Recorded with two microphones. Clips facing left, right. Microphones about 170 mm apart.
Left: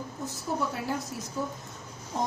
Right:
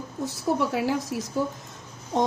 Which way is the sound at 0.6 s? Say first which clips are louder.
Right 6 dB; 90° right.